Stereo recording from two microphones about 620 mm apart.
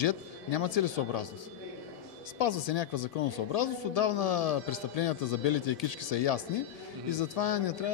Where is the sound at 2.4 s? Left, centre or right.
Left.